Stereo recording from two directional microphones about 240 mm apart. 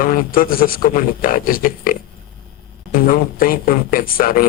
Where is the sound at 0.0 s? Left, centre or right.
Left.